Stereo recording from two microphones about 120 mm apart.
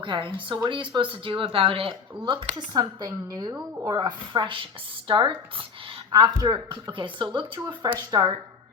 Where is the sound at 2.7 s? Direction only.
30° right (ahead or behind); by 6.0 s 45° right (ahead or behind).